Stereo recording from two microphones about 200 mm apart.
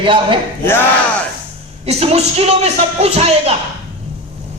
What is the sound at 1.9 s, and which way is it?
A man's voice, 30° right (ahead or behind).